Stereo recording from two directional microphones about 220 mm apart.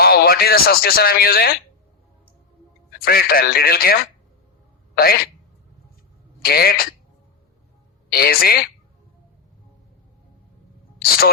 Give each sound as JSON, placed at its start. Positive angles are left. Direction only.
{"t": 0.0, "sound": "speech", "side_deg": 45}
{"t": 3.0, "sound": "speech", "side_deg": 45}
{"t": 4.9, "sound": "speech", "side_deg": 40}
{"t": 6.4, "sound": "speech", "side_deg": 45}
{"t": 8.1, "sound": "speech", "side_deg": 45}